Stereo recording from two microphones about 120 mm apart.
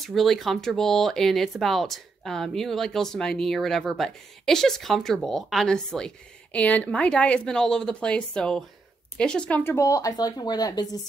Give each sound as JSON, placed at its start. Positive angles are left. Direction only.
{"t": 0.0, "sound": "speech", "side_deg": 0}